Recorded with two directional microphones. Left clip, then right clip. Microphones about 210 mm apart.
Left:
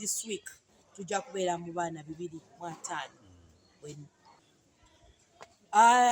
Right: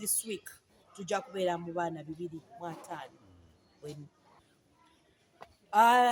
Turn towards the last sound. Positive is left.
turn(degrees=0)  # may be behind; listen again after turning